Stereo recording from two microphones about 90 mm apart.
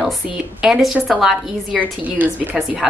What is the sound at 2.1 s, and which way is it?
Speech, 20° right (ahead or behind).